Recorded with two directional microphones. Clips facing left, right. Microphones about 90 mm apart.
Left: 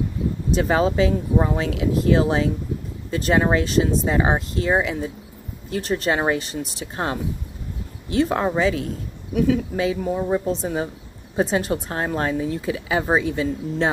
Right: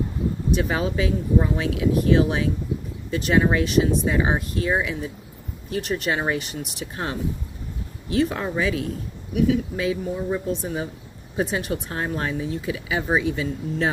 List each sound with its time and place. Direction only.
0.6 s speech: 35° left (ahead or behind)